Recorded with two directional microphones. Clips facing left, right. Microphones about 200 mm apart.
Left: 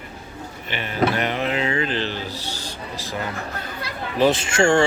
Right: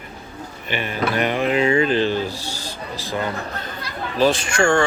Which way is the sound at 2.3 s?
10° right (ahead or behind).